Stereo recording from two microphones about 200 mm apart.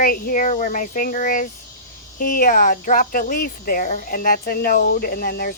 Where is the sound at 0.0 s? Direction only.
45° left (ahead or behind).